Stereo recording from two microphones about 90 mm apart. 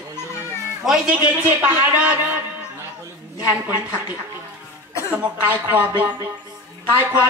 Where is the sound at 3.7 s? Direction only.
20° right (ahead or behind).